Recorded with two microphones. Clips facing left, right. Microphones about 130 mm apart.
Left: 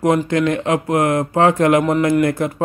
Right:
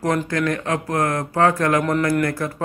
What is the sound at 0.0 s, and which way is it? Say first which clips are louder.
Speech: left 5 dB; 20° left (ahead or behind).